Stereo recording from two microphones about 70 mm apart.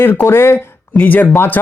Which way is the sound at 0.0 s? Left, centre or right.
Left.